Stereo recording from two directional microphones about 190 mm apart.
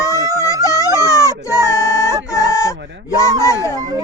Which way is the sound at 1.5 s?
15° left (ahead or behind).